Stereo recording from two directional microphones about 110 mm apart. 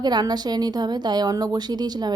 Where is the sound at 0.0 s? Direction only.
40° right (ahead or behind).